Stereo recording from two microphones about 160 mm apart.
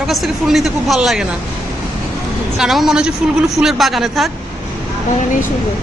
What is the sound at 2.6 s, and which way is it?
A woman's voice, centre (ahead or behind).